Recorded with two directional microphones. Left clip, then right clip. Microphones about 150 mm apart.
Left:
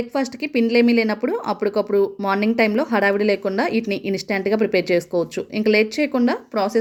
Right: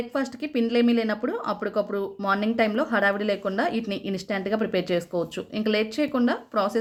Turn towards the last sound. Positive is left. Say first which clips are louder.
# left 4 dB
turn(degrees=25)  # may be behind; listen again after turning